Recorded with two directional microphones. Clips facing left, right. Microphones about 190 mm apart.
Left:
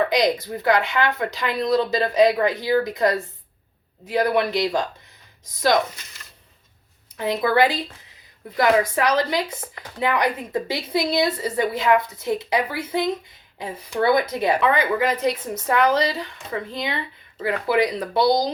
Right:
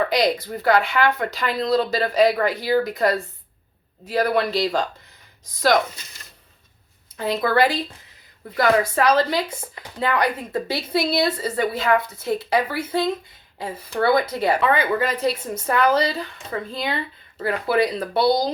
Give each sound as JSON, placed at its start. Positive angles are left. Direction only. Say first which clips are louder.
{"t": 0.1, "sound": "speech", "louder": "even", "side_deg": 20}
{"t": 7.2, "sound": "a woman's voice", "louder": "even", "side_deg": 20}